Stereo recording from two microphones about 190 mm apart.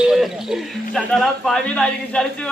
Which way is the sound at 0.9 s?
Centre (ahead or behind).